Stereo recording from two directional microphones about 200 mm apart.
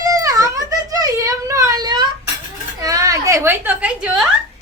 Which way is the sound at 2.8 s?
15° right (ahead or behind).